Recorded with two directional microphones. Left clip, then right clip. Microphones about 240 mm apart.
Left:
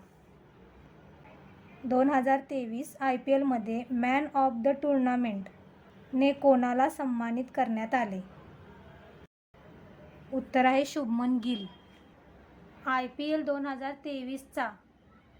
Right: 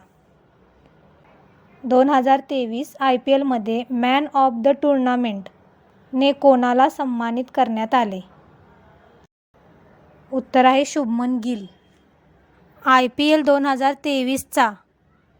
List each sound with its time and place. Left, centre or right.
1.9 s a woman's voice: right
10.3 s a woman's voice: right
12.8 s a woman's voice: right